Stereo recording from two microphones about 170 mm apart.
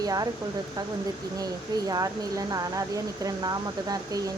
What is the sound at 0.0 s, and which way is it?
Speech, 20° right (ahead or behind).